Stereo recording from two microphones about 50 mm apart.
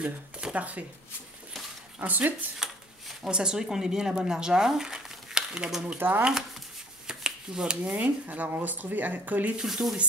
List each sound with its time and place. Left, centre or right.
0.4 s speech: right
2.0 s speech: right
3.3 s speech: centre
5.9 s speech: right
7.1 s shuffling cards: centre
7.8 s speech: right
9.6 s speech: centre